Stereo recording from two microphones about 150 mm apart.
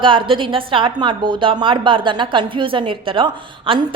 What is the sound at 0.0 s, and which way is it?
A woman's voice, 35° right (ahead or behind).